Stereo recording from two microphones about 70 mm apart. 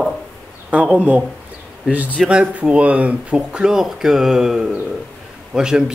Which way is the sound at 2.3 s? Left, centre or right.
Centre.